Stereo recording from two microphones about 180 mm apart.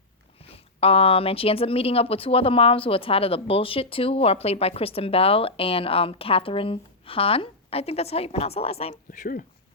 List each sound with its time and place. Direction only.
0.4 s speech: 30° left (ahead or behind)